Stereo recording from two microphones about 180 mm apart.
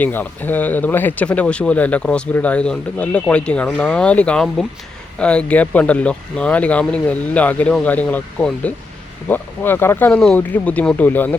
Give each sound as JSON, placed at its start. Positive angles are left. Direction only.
{"t": 0.0, "sound": "speech", "side_deg": 10}